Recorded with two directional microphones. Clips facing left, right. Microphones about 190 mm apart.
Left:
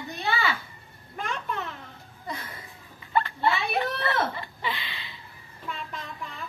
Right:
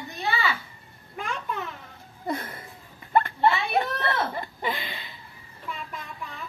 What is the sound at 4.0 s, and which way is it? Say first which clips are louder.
Speech: even; 45° right (ahead or behind).